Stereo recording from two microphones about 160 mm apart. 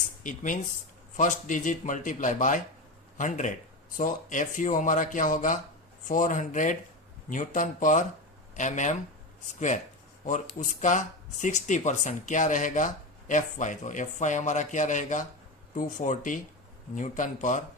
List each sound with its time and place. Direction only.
0.2 s speech: 55° left (ahead or behind)